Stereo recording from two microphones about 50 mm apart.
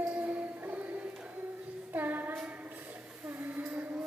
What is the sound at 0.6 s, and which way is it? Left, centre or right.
Music, right.